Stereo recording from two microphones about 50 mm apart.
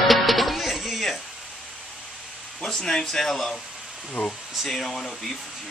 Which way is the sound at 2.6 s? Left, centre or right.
Centre.